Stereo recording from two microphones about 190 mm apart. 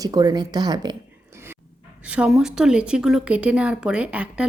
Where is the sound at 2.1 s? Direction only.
5° right (ahead or behind).